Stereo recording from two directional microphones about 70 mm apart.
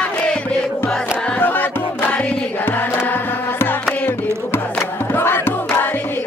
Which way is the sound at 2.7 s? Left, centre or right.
Left.